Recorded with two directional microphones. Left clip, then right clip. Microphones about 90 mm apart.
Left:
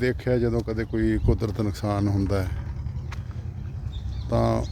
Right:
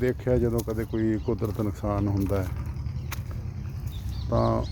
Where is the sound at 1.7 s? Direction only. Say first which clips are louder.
Left 2 dB; 45° left (ahead or behind).